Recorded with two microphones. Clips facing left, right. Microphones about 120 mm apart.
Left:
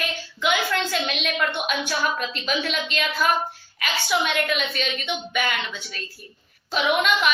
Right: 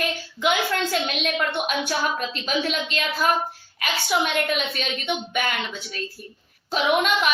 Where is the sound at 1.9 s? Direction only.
40° right (ahead or behind).